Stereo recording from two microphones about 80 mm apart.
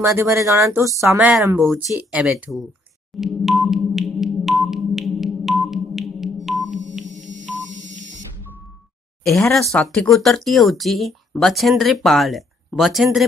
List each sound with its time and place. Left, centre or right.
0.0 s speech: right
1.6 s speech: centre
2.2 s speech: centre
3.2 s music: centre
9.2 s speech: centre